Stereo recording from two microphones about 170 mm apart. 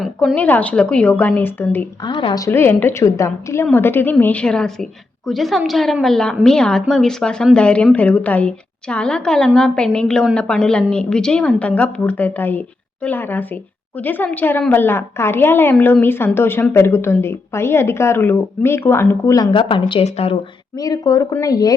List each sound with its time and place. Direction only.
0.0 s speech: centre (ahead or behind)
0.3 s a woman's voice: 10° left (ahead or behind)
2.0 s a woman's voice: 25° left (ahead or behind)
20.7 s speech: 20° left (ahead or behind)